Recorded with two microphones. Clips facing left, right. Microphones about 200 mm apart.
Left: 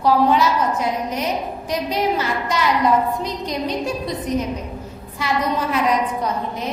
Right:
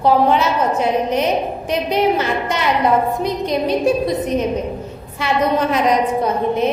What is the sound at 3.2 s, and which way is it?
A woman's voice, 55° right (ahead or behind).